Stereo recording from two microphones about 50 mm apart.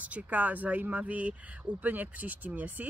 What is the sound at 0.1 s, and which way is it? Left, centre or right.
Speech, right.